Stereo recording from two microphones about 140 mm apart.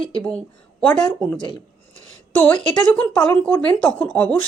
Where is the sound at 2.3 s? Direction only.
10° left (ahead or behind).